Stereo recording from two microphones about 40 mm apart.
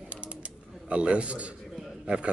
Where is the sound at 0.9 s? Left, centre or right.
Right.